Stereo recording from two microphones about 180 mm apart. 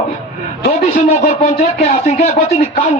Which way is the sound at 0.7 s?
35° left (ahead or behind).